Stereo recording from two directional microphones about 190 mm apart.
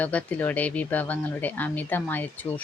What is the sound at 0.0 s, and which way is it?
Speech, 5° left (ahead or behind).